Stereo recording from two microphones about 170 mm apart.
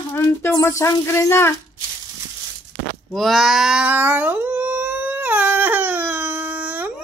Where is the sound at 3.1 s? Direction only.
Centre (ahead or behind).